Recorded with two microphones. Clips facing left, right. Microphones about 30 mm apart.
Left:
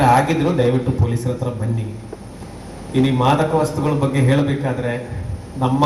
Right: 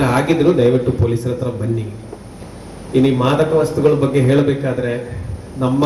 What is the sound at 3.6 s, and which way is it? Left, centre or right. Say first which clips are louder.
Speech: right 5 dB; right.